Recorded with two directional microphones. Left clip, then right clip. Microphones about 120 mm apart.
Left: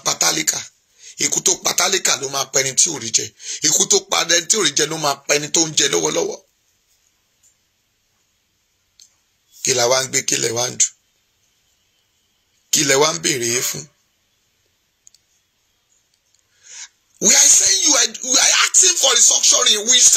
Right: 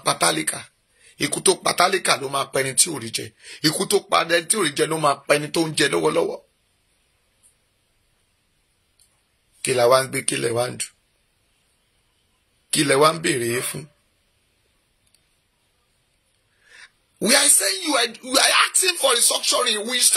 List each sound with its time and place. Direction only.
0.0 s speech: 30° right (ahead or behind)
3.7 s speech: 10° right (ahead or behind)
4.3 s speech: 25° right (ahead or behind)
9.6 s speech: 30° right (ahead or behind)
12.6 s speech: 25° right (ahead or behind)
16.8 s speech: 20° right (ahead or behind)